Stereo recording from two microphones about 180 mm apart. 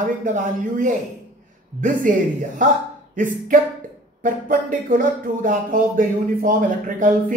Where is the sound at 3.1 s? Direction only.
50° right (ahead or behind).